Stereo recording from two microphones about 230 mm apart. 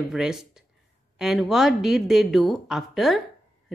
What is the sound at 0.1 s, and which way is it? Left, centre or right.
A woman's voice, centre.